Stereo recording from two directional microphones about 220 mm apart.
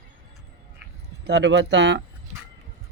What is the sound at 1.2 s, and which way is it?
Speech, 55° right (ahead or behind).